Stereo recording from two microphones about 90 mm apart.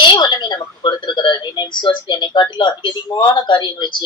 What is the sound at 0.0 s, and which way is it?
Speech, 55° left (ahead or behind).